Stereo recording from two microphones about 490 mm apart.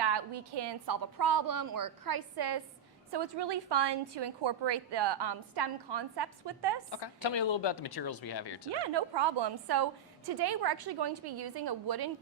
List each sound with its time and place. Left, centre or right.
0.0 s a woman's voice: right
6.9 s speech: left
8.9 s a woman's voice: right